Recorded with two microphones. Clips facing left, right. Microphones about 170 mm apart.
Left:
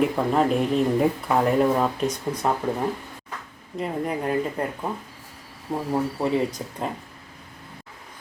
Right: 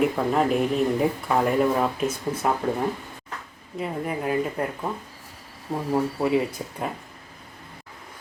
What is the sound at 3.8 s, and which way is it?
Speech, 5° right (ahead or behind).